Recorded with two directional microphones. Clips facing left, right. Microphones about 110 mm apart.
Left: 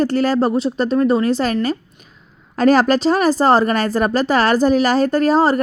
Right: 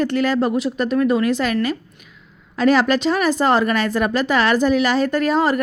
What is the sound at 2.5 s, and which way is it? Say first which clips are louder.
A woman's voice: left 3 dB; 40° left (ahead or behind).